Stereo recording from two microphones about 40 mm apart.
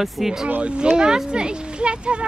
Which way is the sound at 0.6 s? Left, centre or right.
Right.